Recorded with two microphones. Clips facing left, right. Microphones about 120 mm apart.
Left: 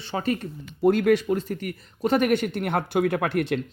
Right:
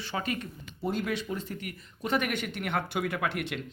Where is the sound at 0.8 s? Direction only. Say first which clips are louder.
Left 11 dB; 70° left (ahead or behind).